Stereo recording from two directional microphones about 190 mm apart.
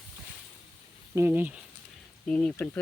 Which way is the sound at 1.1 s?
10° right (ahead or behind).